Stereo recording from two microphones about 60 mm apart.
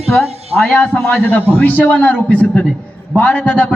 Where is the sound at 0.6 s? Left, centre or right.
Left.